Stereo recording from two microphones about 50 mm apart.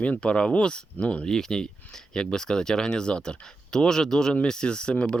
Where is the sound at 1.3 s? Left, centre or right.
Centre.